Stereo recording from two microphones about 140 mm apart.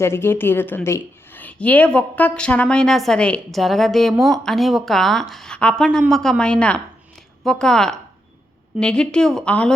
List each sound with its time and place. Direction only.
0.0 s a woman's voice: 15° left (ahead or behind)